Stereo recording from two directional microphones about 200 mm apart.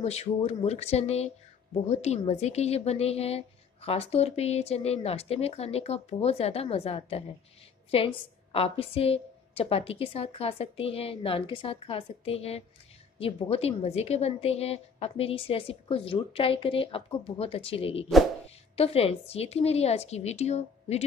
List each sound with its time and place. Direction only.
0.0 s speech: 30° left (ahead or behind)
8.5 s a woman's voice: 30° left (ahead or behind)